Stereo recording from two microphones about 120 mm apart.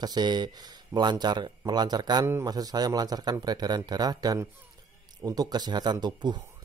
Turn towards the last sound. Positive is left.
turn(degrees=-35)  # may be behind; listen again after turning